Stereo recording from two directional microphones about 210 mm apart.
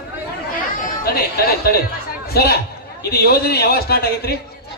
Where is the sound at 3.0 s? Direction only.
45° left (ahead or behind).